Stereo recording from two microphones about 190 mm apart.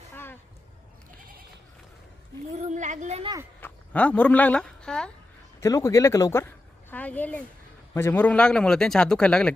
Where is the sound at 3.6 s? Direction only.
5° left (ahead or behind).